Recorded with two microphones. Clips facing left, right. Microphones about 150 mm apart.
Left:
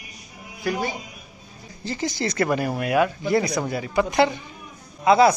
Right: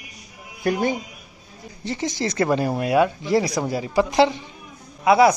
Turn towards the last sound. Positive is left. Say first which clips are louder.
# right 1 dB
turn(degrees=-10)  # may be behind; listen again after turning